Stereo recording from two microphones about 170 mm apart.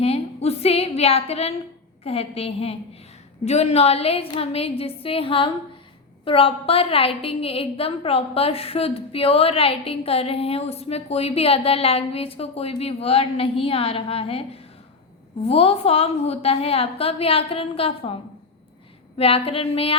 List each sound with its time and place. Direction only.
0.0 s a sound: 35° left (ahead or behind)
2.0 s a woman's voice: 35° left (ahead or behind)
19.1 s a woman's voice: 35° left (ahead or behind)